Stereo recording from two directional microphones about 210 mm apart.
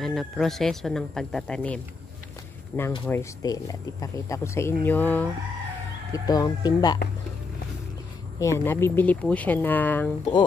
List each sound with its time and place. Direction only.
0.0 s speech: centre (ahead or behind); by 7.0 s 20° left (ahead or behind)
8.4 s speech: 15° left (ahead or behind)